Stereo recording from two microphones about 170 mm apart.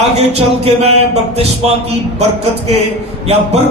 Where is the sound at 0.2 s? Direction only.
35° right (ahead or behind).